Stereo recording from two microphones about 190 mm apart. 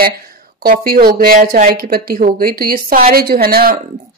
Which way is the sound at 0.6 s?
50° right (ahead or behind).